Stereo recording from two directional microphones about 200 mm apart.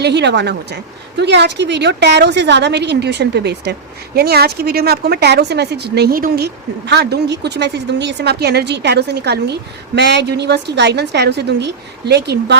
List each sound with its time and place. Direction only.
0.0 s a woman's voice: 60° right (ahead or behind)